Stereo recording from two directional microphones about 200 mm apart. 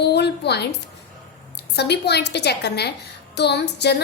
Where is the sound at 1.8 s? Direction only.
55° left (ahead or behind).